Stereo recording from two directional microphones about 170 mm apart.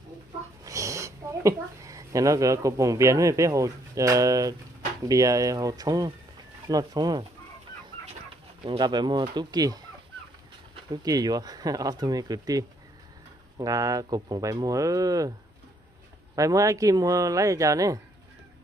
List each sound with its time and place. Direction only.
0.7 s speech: 20° right (ahead or behind)
8.6 s speech: 25° right (ahead or behind)
10.9 s speech: 20° right (ahead or behind)
16.3 s speech: 20° right (ahead or behind)